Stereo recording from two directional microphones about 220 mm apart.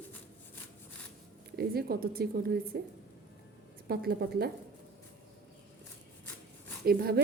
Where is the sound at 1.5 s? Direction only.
45° right (ahead or behind).